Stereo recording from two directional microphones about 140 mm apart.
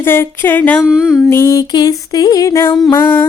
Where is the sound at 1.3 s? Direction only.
20° left (ahead or behind).